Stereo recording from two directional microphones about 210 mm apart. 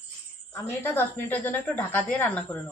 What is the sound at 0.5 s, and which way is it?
A woman's voice, 10° left (ahead or behind).